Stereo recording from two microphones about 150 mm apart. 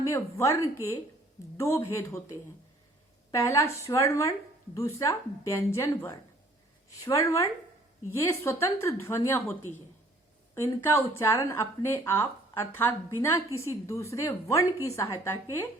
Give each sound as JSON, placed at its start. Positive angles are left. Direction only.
{"t": 0.0, "sound": "speech", "side_deg": 20}